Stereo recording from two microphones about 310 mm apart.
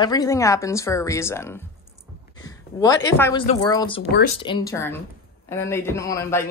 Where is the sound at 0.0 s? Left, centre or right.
Centre.